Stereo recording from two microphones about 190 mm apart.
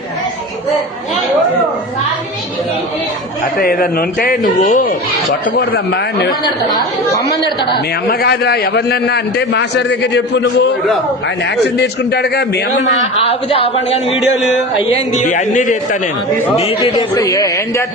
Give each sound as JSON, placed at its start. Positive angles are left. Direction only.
{"t": 3.6, "sound": "speech", "side_deg": 50}
{"t": 5.5, "sound": "a man's voice", "side_deg": 55}
{"t": 7.7, "sound": "a man's voice", "side_deg": 60}
{"t": 11.8, "sound": "a man's voice", "side_deg": 60}
{"t": 12.7, "sound": "a man's voice", "side_deg": 35}
{"t": 15.1, "sound": "a man's voice", "side_deg": 40}
{"t": 16.6, "sound": "a man's voice", "side_deg": 25}